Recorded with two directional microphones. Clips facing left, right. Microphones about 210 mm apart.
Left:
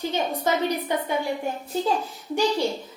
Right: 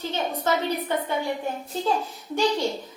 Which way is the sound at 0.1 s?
15° left (ahead or behind).